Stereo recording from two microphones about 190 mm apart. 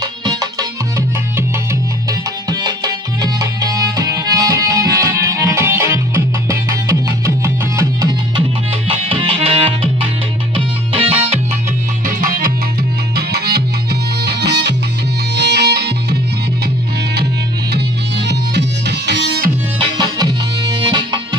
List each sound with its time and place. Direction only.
0.0 s music: 20° right (ahead or behind)
9.0 s music: 30° right (ahead or behind)
12.0 s music: 45° right (ahead or behind)
13.1 s music: 55° right (ahead or behind)
17.7 s music: 65° right (ahead or behind)
20.0 s music: 20° right (ahead or behind)